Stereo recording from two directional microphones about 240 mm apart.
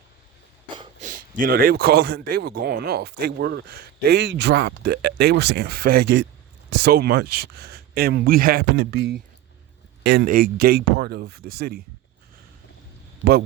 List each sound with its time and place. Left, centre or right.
1.0 s speech: right